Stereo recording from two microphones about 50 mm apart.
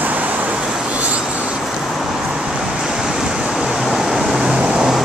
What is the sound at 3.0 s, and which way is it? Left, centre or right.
Waves, centre.